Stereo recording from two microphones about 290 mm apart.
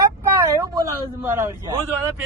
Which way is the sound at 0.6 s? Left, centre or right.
Centre.